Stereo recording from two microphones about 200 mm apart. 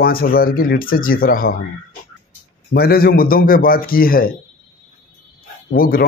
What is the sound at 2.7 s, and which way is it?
Speech, 50° left (ahead or behind).